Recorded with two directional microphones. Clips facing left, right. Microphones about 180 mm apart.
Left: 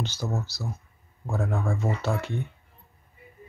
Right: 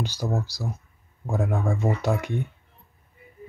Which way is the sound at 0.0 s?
15° right (ahead or behind).